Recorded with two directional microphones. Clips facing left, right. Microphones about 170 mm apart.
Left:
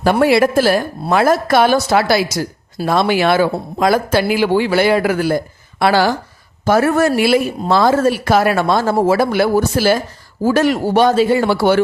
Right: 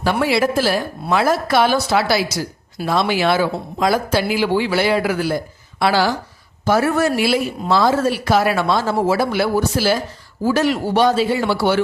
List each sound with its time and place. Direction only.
0.0 s speech: 50° left (ahead or behind)